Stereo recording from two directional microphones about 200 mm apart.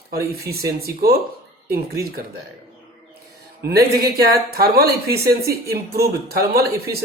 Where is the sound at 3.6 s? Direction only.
50° right (ahead or behind).